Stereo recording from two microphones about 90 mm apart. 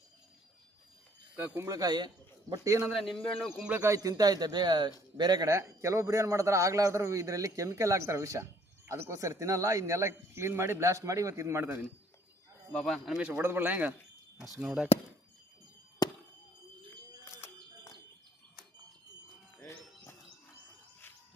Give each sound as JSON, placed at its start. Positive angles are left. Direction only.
{"t": 1.6, "sound": "speech", "side_deg": -45}
{"t": 2.5, "sound": "a man's voice", "side_deg": -35}
{"t": 2.9, "sound": "speech", "side_deg": 0}
{"t": 3.8, "sound": "speech", "side_deg": -40}
{"t": 5.5, "sound": "a man's voice", "side_deg": -35}
{"t": 12.7, "sound": "speech", "side_deg": 5}
{"t": 13.4, "sound": "speech", "side_deg": -25}
{"t": 16.0, "sound": "fireworks", "side_deg": 45}
{"t": 17.2, "sound": "a sound", "side_deg": 30}
{"t": 19.5, "sound": "music", "side_deg": 25}